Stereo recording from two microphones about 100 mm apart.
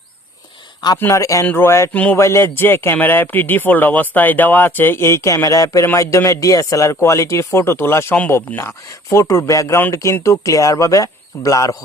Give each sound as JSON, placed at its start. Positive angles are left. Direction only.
{"t": 0.9, "sound": "speech", "side_deg": 25}
{"t": 1.9, "sound": "speech", "side_deg": 15}
{"t": 2.1, "sound": "speech", "side_deg": 25}